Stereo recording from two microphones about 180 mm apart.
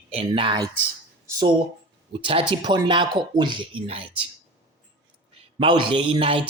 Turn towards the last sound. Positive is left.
turn(degrees=-30)  # may be behind; listen again after turning